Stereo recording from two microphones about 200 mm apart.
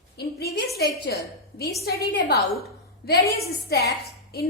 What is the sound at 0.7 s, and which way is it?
A woman's voice, 55° left (ahead or behind).